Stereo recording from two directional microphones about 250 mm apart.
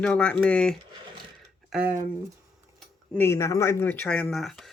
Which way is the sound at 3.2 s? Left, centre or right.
Centre.